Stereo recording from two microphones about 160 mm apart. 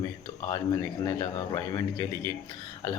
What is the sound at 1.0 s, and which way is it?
Speech, 25° left (ahead or behind).